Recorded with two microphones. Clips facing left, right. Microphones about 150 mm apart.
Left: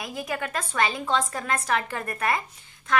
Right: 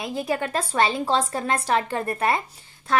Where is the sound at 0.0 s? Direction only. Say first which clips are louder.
Right 5 dB; 30° right (ahead or behind).